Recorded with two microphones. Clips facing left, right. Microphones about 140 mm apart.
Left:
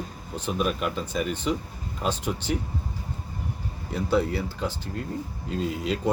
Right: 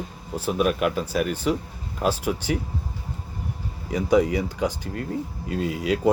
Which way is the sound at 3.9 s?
10° right (ahead or behind).